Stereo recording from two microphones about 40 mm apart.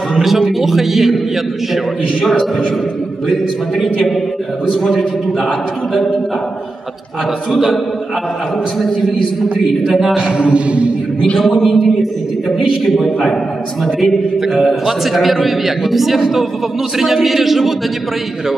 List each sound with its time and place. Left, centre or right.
0.2 s a man's voice: centre
4.8 s a man's voice: centre
9.6 s a man's voice: centre
10.1 s a sound: right
11.3 s a man's voice: centre